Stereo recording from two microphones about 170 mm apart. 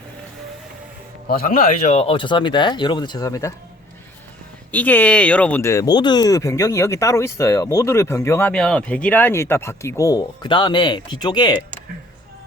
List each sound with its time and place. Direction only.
1.3 s a man's voice: 60° left (ahead or behind)
1.8 s speech: 40° left (ahead or behind); by 3.5 s 20° left (ahead or behind)
4.7 s speech: 10° left (ahead or behind); by 11.5 s 25° left (ahead or behind)